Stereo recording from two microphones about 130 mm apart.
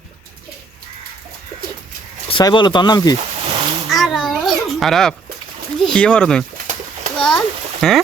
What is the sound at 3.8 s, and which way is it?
Babbling, centre (ahead or behind).